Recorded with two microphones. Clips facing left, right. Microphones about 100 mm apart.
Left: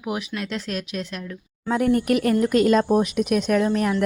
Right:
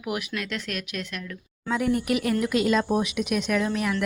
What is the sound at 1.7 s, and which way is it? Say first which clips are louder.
A woman's voice: left 4 dB; 50° left (ahead or behind).